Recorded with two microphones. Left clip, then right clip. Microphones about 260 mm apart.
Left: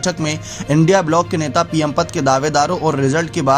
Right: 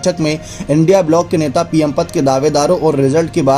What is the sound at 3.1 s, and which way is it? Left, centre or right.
Speech, left.